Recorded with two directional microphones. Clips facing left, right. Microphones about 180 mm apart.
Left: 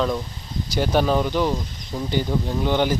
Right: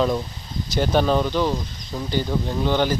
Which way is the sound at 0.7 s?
10° left (ahead or behind).